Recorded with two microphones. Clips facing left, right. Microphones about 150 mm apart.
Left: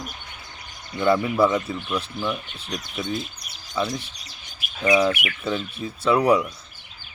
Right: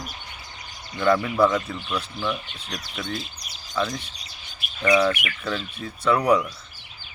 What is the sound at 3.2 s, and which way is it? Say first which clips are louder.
Bird: left 4 dB; 55° left (ahead or behind).